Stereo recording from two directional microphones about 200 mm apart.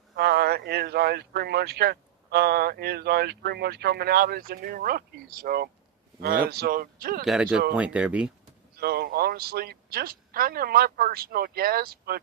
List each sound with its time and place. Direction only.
0.2 s speech: 50° right (ahead or behind)
7.3 s speech: 5° right (ahead or behind)
8.8 s speech: 50° right (ahead or behind)